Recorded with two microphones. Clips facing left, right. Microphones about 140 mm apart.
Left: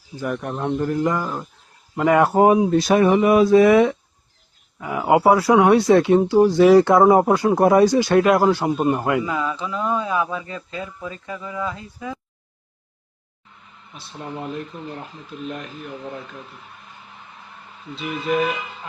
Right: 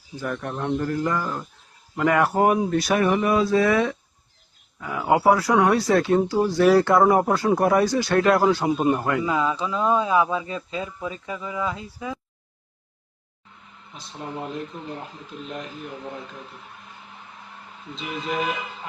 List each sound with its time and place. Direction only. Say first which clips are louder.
0.2 s speech: left 3 dB; 10° left (ahead or behind)
8.7 s a man's voice: left 1 dB; 5° right (ahead or behind)
9.0 s speech: left 3 dB; 15° left (ahead or behind)
9.2 s speech: right 1 dB; 20° right (ahead or behind)